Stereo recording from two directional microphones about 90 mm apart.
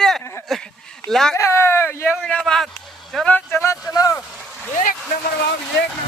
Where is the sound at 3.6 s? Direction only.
35° left (ahead or behind).